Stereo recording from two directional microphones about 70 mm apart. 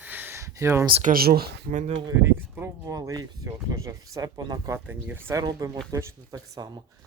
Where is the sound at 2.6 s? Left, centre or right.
Right.